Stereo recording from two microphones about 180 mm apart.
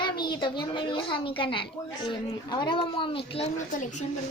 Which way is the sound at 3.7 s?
45° left (ahead or behind).